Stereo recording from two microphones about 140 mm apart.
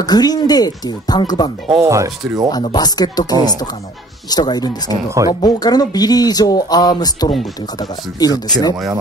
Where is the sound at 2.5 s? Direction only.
30° left (ahead or behind).